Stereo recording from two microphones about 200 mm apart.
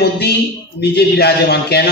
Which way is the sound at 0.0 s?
55° left (ahead or behind).